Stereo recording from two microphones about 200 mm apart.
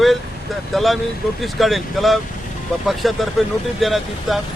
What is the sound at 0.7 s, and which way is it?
Speech, centre (ahead or behind).